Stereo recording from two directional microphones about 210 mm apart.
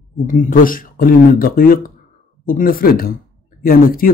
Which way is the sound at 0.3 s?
40° left (ahead or behind).